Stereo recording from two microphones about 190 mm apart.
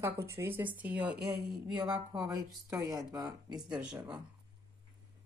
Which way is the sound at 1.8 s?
20° right (ahead or behind).